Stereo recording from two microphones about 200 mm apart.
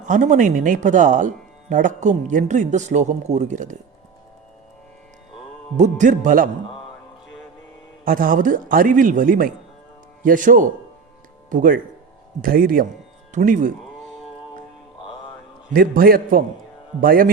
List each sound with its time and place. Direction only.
0.1 s speech: 40° right (ahead or behind)
5.7 s speech: 35° right (ahead or behind)
8.0 s a man's voice: 45° right (ahead or behind)
15.7 s a man's voice: 45° right (ahead or behind)